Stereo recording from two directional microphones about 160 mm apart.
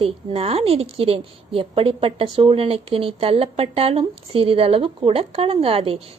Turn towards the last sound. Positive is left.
turn(degrees=-35)  # may be behind; listen again after turning